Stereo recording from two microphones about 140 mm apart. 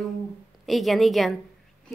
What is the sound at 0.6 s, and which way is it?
Speech, centre (ahead or behind).